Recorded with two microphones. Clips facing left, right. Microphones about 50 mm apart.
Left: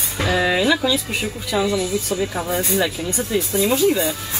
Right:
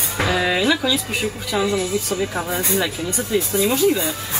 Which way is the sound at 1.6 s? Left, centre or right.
Right.